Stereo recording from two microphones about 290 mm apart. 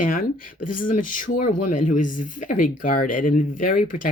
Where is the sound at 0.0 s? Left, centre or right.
Left.